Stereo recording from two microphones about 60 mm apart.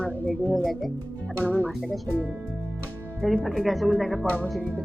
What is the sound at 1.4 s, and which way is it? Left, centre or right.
Speech, left.